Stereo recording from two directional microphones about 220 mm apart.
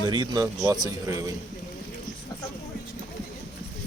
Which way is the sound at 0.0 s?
20° right (ahead or behind).